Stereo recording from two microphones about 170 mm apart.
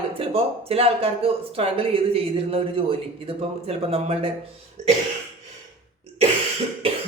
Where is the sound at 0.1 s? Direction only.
35° right (ahead or behind).